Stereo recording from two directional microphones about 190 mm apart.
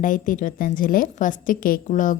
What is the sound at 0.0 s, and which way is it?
A woman's voice, 45° left (ahead or behind).